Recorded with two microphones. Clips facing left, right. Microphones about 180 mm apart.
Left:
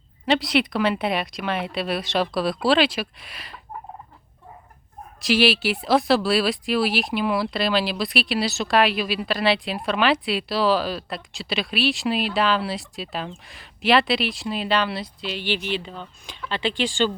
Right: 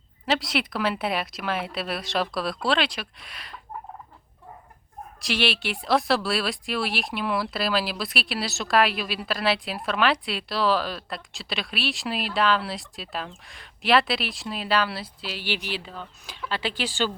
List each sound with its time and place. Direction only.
0.3 s speech: centre (ahead or behind)
5.2 s speech: 5° left (ahead or behind)